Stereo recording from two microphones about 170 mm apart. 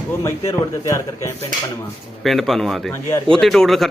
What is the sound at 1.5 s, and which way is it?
Speech, 50° right (ahead or behind).